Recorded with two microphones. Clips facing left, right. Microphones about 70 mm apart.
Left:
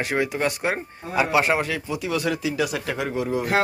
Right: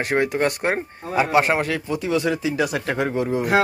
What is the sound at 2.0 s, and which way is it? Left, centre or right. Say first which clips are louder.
Speech: right 3 dB; right.